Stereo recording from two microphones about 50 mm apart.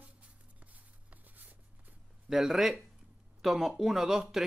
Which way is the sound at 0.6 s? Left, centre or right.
Right.